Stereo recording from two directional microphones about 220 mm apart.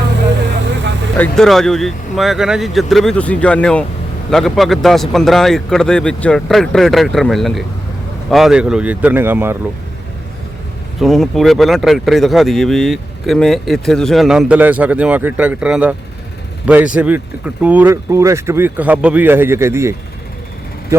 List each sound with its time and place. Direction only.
1.1 s speech: 5° left (ahead or behind)
11.0 s speech: centre (ahead or behind)